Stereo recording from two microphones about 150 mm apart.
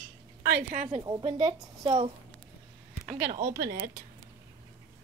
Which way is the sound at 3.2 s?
70° right (ahead or behind).